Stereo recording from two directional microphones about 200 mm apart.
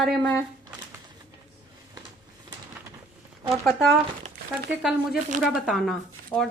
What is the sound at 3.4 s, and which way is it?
Speech, centre (ahead or behind).